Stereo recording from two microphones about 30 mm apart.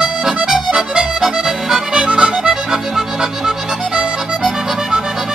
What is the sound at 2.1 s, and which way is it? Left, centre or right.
Music, right.